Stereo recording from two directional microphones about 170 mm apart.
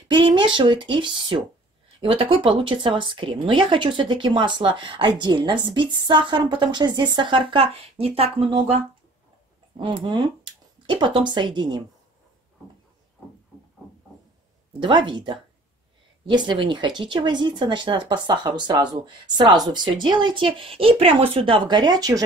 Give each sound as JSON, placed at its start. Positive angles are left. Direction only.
{"t": 0.1, "sound": "speech", "side_deg": -30}
{"t": 9.8, "sound": "speech", "side_deg": -30}
{"t": 14.8, "sound": "speech", "side_deg": -30}